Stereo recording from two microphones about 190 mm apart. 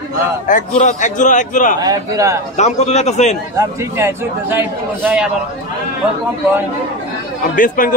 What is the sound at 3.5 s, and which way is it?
A man's voice, 15° right (ahead or behind).